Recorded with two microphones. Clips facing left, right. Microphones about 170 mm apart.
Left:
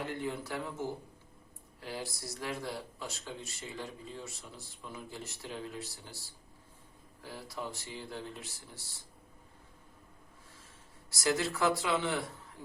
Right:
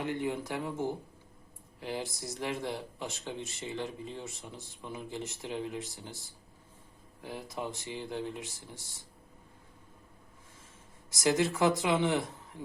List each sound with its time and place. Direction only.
0.0 s speech: 15° right (ahead or behind)
11.1 s speech: 20° right (ahead or behind)